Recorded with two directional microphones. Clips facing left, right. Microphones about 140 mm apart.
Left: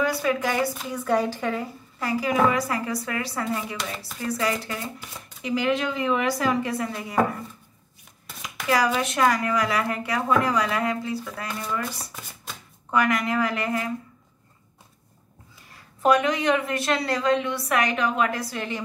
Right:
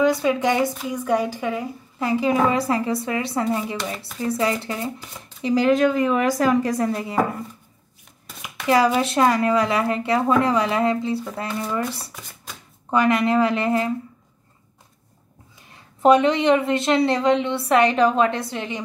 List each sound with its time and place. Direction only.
0.0 s a woman's voice: 20° right (ahead or behind)
2.0 s speech: 25° right (ahead or behind)
5.4 s a woman's voice: 35° right (ahead or behind)
8.6 s speech: 30° right (ahead or behind)
12.9 s speech: 25° right (ahead or behind)
15.7 s speech: 25° right (ahead or behind)